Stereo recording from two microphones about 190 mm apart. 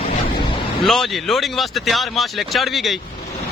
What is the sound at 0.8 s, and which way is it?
Speech, centre (ahead or behind).